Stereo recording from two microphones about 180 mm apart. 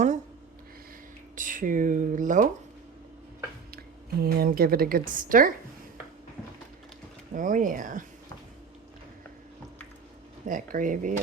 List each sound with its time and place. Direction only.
1.4 s speech: 50° right (ahead or behind)
3.7 s a woman's voice: 60° right (ahead or behind)
7.3 s speech: 45° right (ahead or behind)
10.5 s speech: 50° right (ahead or behind)